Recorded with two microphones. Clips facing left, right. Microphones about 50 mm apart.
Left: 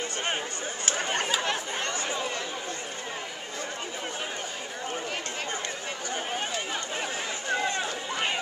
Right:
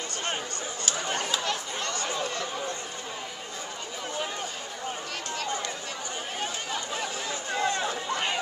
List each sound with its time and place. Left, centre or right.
1.0 s chatter: left
6.4 s a sound: centre
7.5 s run: centre